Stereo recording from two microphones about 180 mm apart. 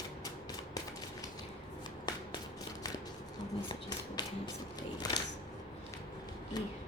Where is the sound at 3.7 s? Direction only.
25° left (ahead or behind).